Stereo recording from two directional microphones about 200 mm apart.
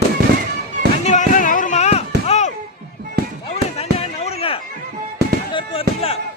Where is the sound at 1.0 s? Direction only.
40° left (ahead or behind).